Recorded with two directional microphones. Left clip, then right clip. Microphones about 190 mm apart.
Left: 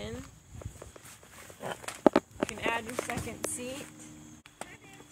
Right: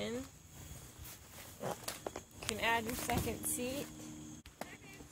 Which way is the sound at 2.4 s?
55° right (ahead or behind).